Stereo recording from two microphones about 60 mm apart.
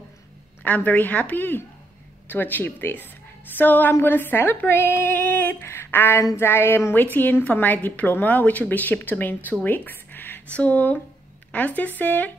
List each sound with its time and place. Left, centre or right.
0.7 s a woman's voice: left